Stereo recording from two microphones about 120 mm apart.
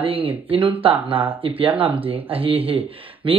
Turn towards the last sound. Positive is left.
turn(degrees=-50)  # may be behind; listen again after turning